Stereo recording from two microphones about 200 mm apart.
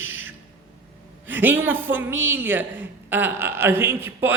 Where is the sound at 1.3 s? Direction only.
10° right (ahead or behind).